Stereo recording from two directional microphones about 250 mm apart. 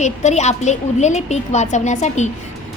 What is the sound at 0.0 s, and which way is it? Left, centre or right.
A woman's voice, left.